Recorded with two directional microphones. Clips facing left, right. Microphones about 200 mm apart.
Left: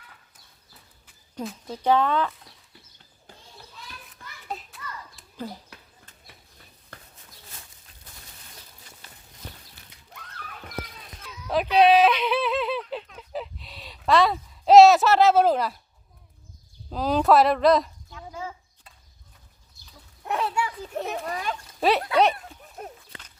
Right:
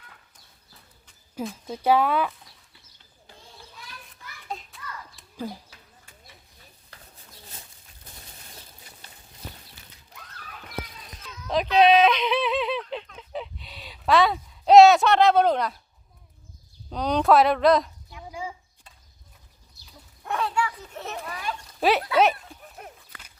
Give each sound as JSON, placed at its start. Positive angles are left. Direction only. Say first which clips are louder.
{"t": 1.4, "sound": "speech", "louder": "right 1 dB", "side_deg": -5}
{"t": 4.4, "sound": "hands", "louder": "left 1 dB", "side_deg": 5}
{"t": 6.9, "sound": "a sound", "louder": "left 5 dB", "side_deg": 50}
{"t": 10.4, "sound": "a sound", "louder": "left 4 dB", "side_deg": 60}
{"t": 11.3, "sound": "yodeling", "louder": "even", "side_deg": 10}
{"t": 16.9, "sound": "speech", "louder": "even", "side_deg": 5}
{"t": 18.1, "sound": "a sound", "louder": "right 1 dB", "side_deg": -10}
{"t": 20.2, "sound": "children playing", "louder": "even", "side_deg": 20}
{"t": 21.2, "sound": "speech", "louder": "left 3 dB", "side_deg": 40}
{"t": 21.8, "sound": "speech", "louder": "even", "side_deg": 0}
{"t": 22.8, "sound": "walk", "louder": "left 8 dB", "side_deg": 30}